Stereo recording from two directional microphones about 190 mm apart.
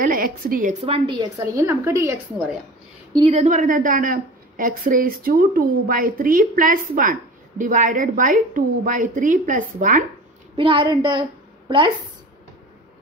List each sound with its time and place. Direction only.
0.0 s a woman's voice: 45° right (ahead or behind); by 2.1 s 15° right (ahead or behind)
3.3 s a woman's voice: 40° right (ahead or behind)
10.5 s a woman's voice: 25° right (ahead or behind)